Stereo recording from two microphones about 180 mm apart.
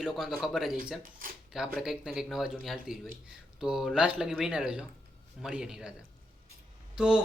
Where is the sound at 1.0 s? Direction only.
50° right (ahead or behind).